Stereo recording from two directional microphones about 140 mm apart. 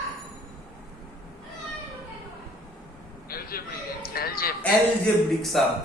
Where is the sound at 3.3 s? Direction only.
90° left.